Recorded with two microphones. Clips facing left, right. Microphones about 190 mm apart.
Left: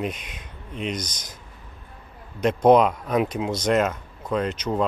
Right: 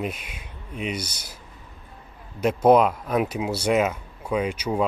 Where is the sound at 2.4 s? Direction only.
5° right (ahead or behind).